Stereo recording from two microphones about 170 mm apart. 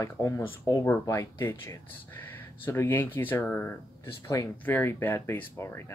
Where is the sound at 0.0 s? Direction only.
15° left (ahead or behind).